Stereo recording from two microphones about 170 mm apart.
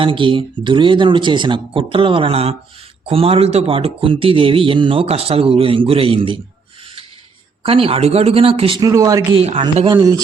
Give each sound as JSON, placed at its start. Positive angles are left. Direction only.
{"t": 0.0, "sound": "a man's voice", "side_deg": -30}
{"t": 7.6, "sound": "a man's voice", "side_deg": -35}
{"t": 9.3, "sound": "a man's voice", "side_deg": -35}